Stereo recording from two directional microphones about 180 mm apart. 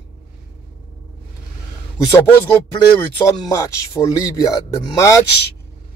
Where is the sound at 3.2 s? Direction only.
20° left (ahead or behind).